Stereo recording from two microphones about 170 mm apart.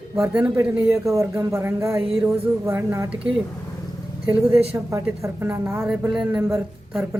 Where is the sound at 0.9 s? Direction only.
20° right (ahead or behind).